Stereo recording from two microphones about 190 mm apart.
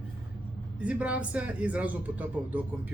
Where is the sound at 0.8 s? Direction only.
5° right (ahead or behind).